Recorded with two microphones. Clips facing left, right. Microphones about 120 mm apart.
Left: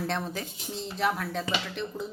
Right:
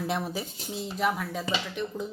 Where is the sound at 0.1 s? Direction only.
10° right (ahead or behind).